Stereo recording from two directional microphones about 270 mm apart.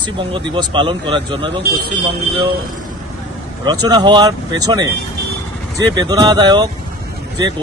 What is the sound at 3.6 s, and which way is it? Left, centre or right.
A man's voice, centre.